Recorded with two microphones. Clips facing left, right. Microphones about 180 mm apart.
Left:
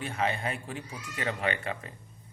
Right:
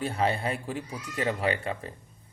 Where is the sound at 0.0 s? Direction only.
35° right (ahead or behind).